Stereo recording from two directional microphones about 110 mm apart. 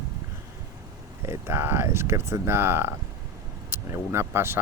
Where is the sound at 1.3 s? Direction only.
20° right (ahead or behind).